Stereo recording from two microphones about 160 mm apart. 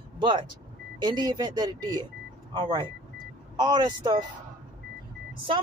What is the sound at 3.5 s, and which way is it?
Speech, 25° right (ahead or behind).